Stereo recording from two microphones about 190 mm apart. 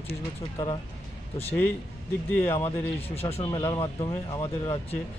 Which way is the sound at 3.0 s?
30° left (ahead or behind).